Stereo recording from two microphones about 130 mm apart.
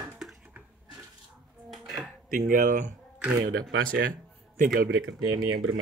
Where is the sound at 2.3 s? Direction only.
90° right.